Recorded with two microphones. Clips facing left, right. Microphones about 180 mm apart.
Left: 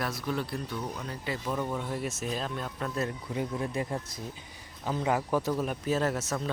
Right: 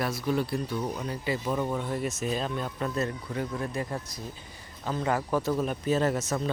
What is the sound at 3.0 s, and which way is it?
Speech, 10° left (ahead or behind).